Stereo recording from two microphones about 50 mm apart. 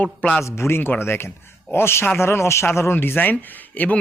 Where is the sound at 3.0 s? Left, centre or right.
Left.